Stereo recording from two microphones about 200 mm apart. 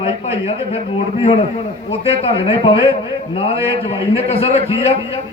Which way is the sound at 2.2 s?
30° left (ahead or behind).